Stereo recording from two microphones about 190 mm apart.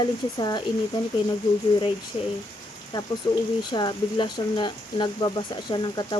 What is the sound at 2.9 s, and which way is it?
Speech, 25° left (ahead or behind).